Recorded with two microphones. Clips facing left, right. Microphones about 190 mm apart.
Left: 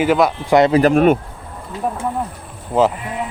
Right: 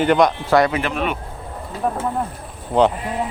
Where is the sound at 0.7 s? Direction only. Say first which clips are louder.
Left 11 dB; 45° left (ahead or behind).